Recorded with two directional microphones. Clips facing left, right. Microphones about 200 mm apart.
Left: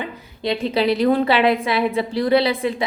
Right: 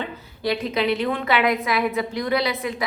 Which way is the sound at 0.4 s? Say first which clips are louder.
Left 3 dB; 25° left (ahead or behind).